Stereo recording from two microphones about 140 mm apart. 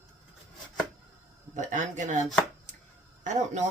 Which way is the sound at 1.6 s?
60° right (ahead or behind).